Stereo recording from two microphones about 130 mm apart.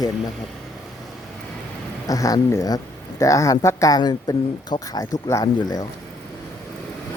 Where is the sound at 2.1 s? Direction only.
25° left (ahead or behind).